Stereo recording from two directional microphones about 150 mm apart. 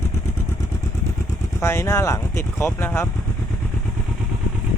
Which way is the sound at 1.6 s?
20° left (ahead or behind).